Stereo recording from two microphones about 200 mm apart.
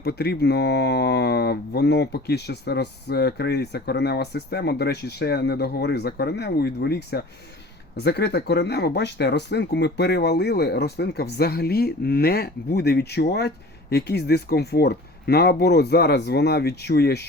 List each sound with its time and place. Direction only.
0.0 s speech: 55° left (ahead or behind)